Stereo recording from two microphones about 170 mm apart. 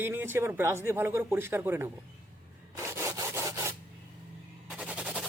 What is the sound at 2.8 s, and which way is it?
Sawing, 15° right (ahead or behind).